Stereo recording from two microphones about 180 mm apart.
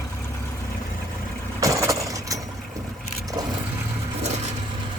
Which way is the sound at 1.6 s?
20° right (ahead or behind).